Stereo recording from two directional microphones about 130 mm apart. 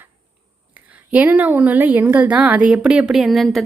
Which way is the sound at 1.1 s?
10° right (ahead or behind).